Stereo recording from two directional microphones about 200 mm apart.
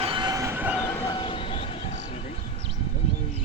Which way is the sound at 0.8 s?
15° left (ahead or behind).